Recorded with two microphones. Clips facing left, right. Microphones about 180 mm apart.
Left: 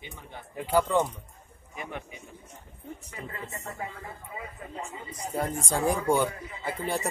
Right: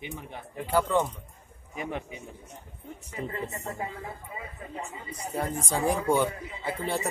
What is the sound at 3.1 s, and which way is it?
Speech, 20° right (ahead or behind).